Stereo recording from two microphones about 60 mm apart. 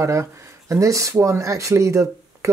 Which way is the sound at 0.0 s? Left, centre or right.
Right.